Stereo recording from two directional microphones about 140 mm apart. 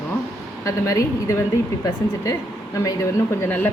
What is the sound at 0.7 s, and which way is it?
A woman's voice, 20° left (ahead or behind).